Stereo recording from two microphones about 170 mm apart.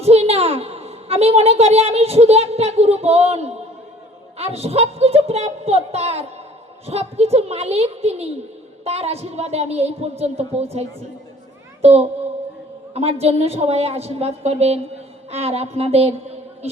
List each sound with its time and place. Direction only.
0.0 s a woman's voice: 40° right (ahead or behind)